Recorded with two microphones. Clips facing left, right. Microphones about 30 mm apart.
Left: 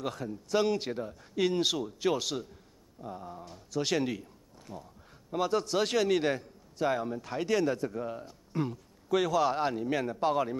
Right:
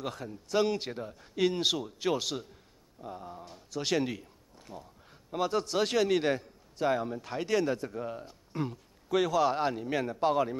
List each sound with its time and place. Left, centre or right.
0.0 s a man's voice: centre
3.8 s a man's voice: centre
4.2 s a sound: right
5.3 s a man's voice: centre